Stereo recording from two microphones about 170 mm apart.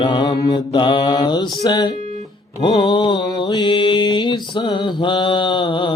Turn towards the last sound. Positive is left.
turn(degrees=30)  # may be behind; listen again after turning